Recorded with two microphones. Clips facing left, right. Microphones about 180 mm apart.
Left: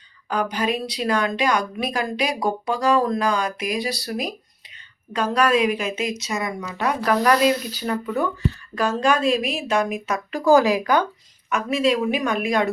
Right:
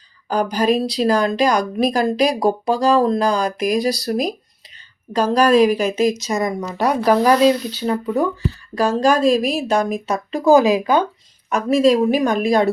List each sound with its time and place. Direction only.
0.3 s a woman's voice: 35° right (ahead or behind)
10.4 s speech: 20° right (ahead or behind)
11.4 s a woman's voice: 40° right (ahead or behind)